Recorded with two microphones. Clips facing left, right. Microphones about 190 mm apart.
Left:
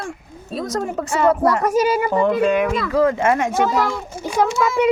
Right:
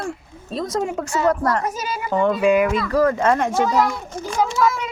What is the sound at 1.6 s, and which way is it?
Speech, 65° left (ahead or behind).